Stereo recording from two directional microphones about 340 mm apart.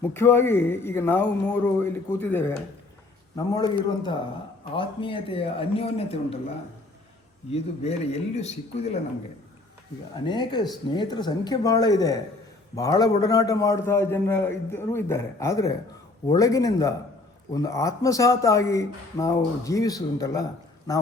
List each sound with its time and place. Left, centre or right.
0.0 s a man's voice: centre
7.5 s speech: centre
10.2 s a man's voice: centre